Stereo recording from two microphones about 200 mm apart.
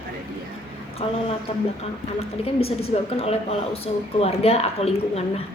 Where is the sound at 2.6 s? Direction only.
30° left (ahead or behind).